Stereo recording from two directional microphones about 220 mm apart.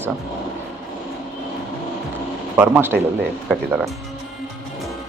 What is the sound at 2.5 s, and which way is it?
Speech, 10° right (ahead or behind).